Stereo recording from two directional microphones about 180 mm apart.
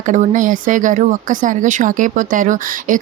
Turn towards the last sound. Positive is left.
turn(degrees=-45)  # may be behind; listen again after turning